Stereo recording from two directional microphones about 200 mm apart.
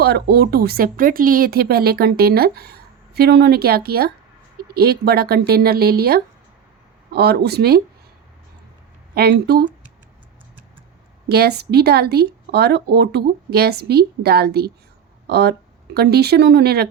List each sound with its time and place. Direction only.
0.0 s speech: 55° right (ahead or behind)
9.1 s speech: 50° right (ahead or behind)
11.3 s speech: 55° right (ahead or behind)